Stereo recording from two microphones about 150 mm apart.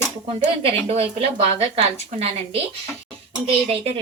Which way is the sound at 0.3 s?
40° right (ahead or behind).